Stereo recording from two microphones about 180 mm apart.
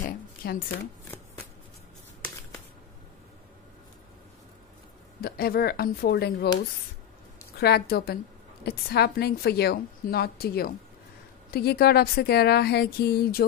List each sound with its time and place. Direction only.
0.0 s a sound: 55° left (ahead or behind)
5.2 s a woman's voice: 60° left (ahead or behind)
7.5 s a woman's voice: 60° left (ahead or behind)